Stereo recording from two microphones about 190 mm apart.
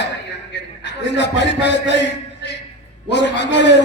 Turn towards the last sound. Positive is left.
turn(degrees=65)  # may be behind; listen again after turning